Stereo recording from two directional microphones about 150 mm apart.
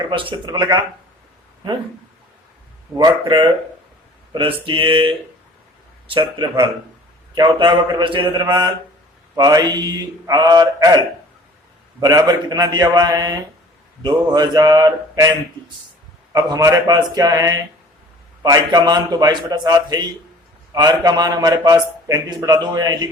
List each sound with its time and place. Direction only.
0.0 s a man's voice: 35° right (ahead or behind)
3.0 s a man's voice: 30° right (ahead or behind)